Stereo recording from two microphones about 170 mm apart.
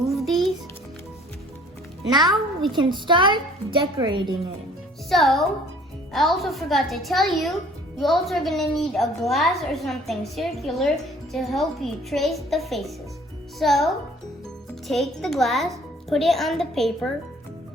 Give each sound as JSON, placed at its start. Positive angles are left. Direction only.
{"t": 0.0, "sound": "music", "side_deg": 0}
{"t": 2.0, "sound": "a woman's voice", "side_deg": -25}
{"t": 5.0, "sound": "a woman's voice", "side_deg": 0}